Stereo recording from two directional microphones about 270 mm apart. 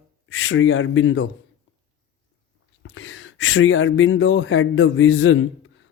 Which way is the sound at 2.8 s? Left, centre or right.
Left.